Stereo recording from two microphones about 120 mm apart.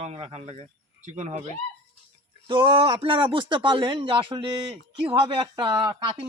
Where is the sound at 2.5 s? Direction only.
45° right (ahead or behind).